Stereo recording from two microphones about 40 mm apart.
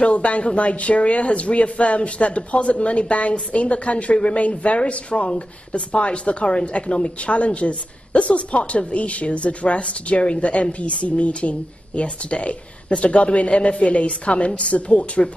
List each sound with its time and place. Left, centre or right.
0.0 s speech: left